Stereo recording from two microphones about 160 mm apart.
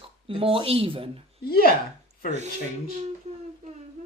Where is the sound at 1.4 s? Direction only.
70° left (ahead or behind).